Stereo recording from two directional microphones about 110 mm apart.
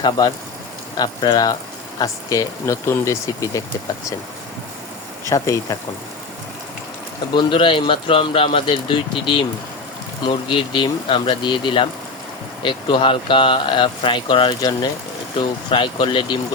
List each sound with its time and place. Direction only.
0.0 s speech: 40° left (ahead or behind)
5.3 s speech: 30° left (ahead or behind)
7.3 s speech: 50° left (ahead or behind)